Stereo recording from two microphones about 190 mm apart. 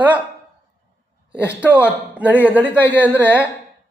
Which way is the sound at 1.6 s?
10° right (ahead or behind).